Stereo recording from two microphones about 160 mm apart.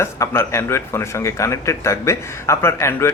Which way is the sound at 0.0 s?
15° left (ahead or behind).